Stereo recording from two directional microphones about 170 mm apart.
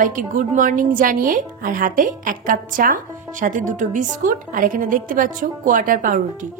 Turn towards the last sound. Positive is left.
turn(degrees=-55)  # may be behind; listen again after turning